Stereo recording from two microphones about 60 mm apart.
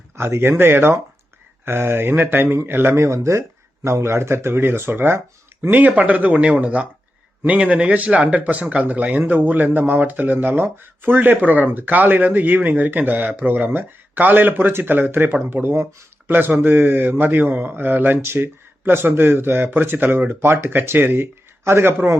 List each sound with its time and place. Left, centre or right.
0.2 s a man's voice: right
3.0 s speech: right
5.7 s a man's voice: right